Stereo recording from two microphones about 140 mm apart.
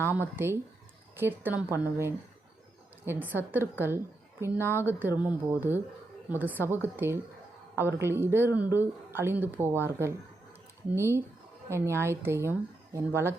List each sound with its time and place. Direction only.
0.0 s a woman's voice: 15° right (ahead or behind)